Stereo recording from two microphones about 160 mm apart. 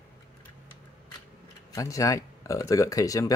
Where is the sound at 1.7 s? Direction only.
20° left (ahead or behind).